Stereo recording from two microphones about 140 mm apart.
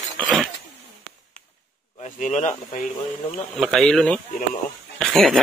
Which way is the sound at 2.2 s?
60° left (ahead or behind).